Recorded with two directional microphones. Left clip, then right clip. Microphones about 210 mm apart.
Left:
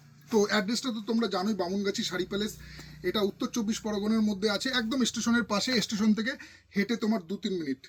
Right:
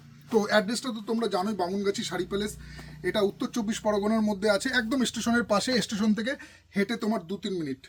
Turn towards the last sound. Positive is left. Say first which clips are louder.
# right 1 dB
turn(degrees=-25)  # may be behind; listen again after turning